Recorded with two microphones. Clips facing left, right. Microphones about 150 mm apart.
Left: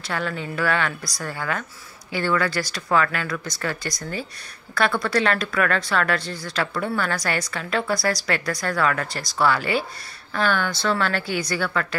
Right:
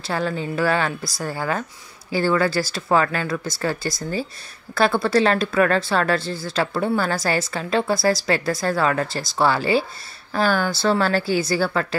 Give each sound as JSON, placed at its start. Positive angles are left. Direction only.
{"t": 0.0, "sound": "speech", "side_deg": -30}